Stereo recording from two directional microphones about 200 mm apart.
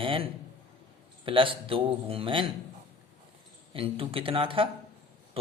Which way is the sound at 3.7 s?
30° right (ahead or behind).